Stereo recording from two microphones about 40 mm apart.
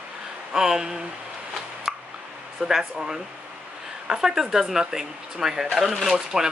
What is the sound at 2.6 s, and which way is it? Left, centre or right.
Speech, centre.